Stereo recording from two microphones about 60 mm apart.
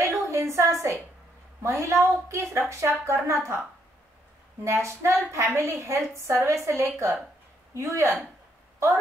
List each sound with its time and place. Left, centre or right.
0.0 s a sound: right
1.6 s a woman's voice: right
4.6 s a woman's voice: right